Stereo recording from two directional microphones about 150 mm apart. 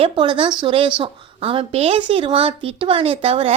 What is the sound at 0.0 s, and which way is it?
A woman's voice, 35° right (ahead or behind).